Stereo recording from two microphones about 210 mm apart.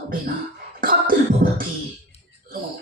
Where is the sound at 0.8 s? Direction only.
40° right (ahead or behind).